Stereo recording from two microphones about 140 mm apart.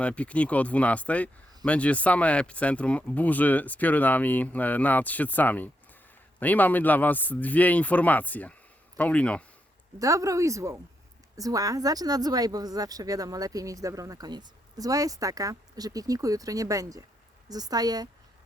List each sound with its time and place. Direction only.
0.0 s speech: 10° left (ahead or behind)
10.0 s speech: 25° right (ahead or behind)